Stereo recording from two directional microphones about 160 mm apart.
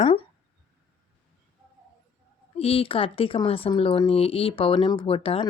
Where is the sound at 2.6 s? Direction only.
35° left (ahead or behind).